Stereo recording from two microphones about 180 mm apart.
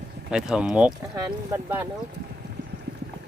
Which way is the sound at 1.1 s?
15° right (ahead or behind).